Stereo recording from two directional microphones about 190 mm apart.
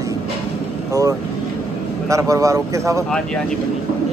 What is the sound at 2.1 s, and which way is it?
Speech, 15° right (ahead or behind).